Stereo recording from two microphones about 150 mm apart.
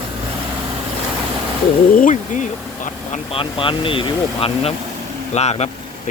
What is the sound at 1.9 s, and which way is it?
Speech, 60° left (ahead or behind).